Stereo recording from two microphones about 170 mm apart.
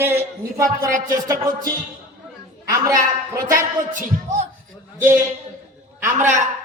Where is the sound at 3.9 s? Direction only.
50° right (ahead or behind).